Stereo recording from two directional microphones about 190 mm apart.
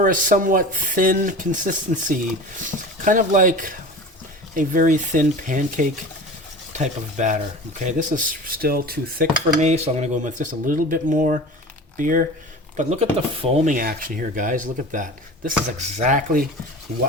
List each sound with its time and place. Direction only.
0.0 s speech: 45° right (ahead or behind)
12.7 s speech: 35° right (ahead or behind)
13.7 s speech: 45° right (ahead or behind)